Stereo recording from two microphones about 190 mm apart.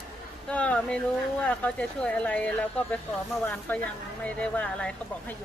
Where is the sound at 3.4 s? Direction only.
10° left (ahead or behind).